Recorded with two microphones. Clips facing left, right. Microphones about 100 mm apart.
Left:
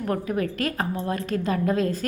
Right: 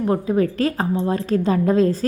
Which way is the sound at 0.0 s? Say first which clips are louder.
Right 7 dB; 25° right (ahead or behind).